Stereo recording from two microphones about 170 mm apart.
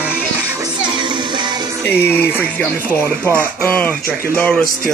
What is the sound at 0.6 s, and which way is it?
Music, 25° right (ahead or behind).